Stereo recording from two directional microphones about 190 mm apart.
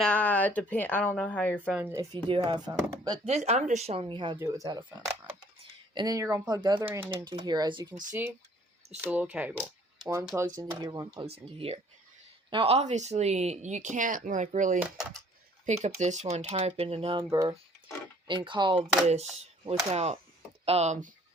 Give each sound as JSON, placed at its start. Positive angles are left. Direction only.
{"t": 0.0, "sound": "speech", "side_deg": 5}
{"t": 1.7, "sound": "speech", "side_deg": -10}
{"t": 2.1, "sound": "speech", "side_deg": -25}
{"t": 3.2, "sound": "speech", "side_deg": -35}
{"t": 7.1, "sound": "speech", "side_deg": -20}
{"t": 9.0, "sound": "speech", "side_deg": -5}
{"t": 11.5, "sound": "speech", "side_deg": -30}
{"t": 17.2, "sound": "speech", "side_deg": -20}
{"t": 19.0, "sound": "speech", "side_deg": -35}